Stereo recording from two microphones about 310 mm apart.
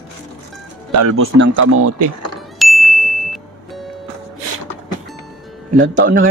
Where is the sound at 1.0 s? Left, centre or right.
Right.